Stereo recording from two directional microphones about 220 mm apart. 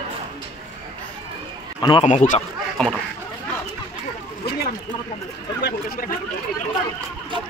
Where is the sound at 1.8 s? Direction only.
25° left (ahead or behind).